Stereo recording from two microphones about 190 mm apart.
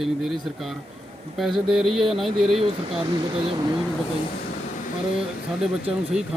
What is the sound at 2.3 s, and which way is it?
Speech, 30° right (ahead or behind).